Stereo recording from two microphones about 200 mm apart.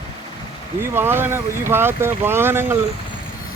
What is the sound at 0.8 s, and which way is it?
Speech, 10° right (ahead or behind).